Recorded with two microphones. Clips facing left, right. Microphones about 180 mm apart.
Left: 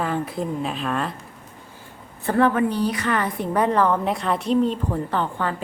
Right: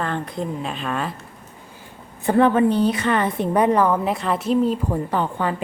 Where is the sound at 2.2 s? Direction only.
20° right (ahead or behind).